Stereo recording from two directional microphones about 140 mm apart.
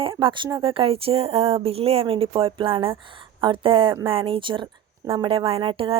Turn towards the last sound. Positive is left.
turn(degrees=-40)  # may be behind; listen again after turning